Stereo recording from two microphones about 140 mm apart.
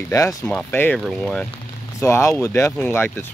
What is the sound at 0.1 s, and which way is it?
Speech, 20° left (ahead or behind).